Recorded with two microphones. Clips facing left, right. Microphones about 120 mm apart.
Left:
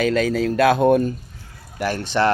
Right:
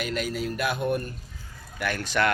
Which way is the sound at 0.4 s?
90° left.